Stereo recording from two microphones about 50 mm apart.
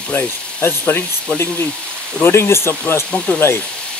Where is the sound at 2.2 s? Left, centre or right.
Left.